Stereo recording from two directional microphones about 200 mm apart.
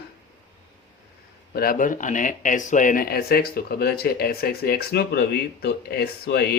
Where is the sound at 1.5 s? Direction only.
45° left (ahead or behind).